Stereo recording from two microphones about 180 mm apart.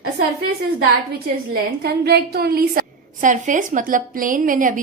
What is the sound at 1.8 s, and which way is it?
A woman's voice, 60° right (ahead or behind).